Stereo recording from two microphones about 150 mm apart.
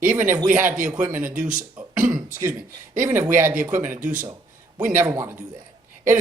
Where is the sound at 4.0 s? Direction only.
60° right (ahead or behind).